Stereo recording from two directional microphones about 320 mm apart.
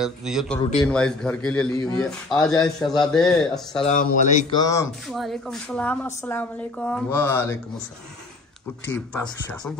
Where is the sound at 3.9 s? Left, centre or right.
Left; by 7.6 s centre.